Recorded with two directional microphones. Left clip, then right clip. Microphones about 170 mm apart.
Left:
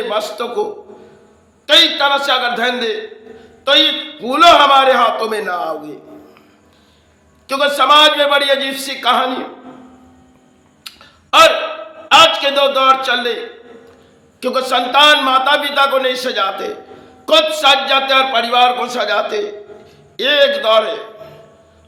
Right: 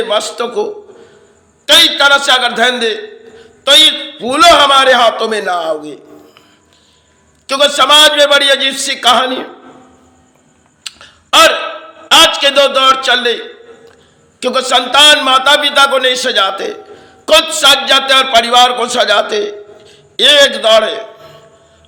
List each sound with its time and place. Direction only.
0.1 s a man's voice: 20° right (ahead or behind)
7.4 s a man's voice: 20° right (ahead or behind)
10.8 s a sound: 25° right (ahead or behind)
12.1 s a man's voice: 25° right (ahead or behind)